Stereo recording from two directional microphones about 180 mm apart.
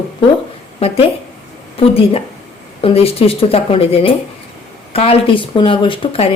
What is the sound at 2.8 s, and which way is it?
Speech, 35° left (ahead or behind).